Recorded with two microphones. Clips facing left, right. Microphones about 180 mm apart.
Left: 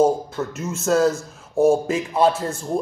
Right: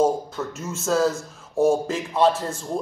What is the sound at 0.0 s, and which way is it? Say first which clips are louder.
A man's voice: left 3 dB; 10° left (ahead or behind).